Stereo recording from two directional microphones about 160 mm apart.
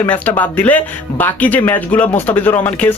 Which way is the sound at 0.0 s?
10° left (ahead or behind).